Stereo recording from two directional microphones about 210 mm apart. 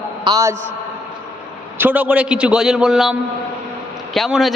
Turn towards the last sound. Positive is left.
turn(degrees=0)  # may be behind; listen again after turning